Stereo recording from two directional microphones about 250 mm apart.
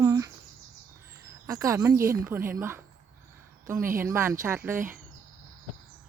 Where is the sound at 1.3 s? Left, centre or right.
Centre.